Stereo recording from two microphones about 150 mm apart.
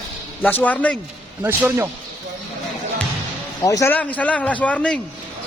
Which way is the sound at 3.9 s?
10° left (ahead or behind).